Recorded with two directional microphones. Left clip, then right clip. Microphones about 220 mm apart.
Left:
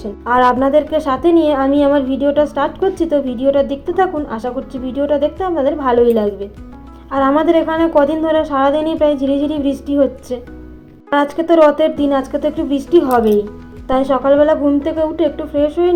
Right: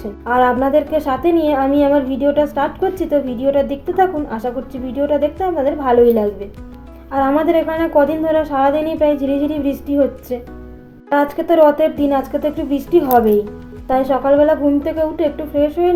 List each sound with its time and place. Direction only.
0.0 s speech: 10° left (ahead or behind)